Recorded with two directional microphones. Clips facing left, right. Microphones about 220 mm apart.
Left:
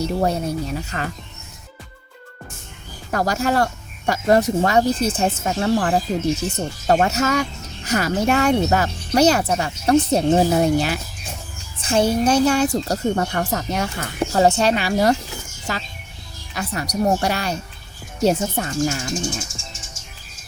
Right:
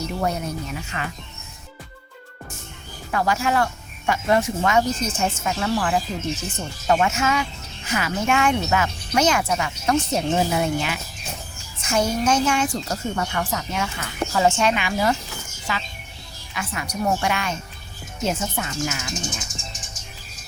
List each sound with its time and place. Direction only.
0.0 s speech: 30° left (ahead or behind)
3.1 s speech: 40° left (ahead or behind)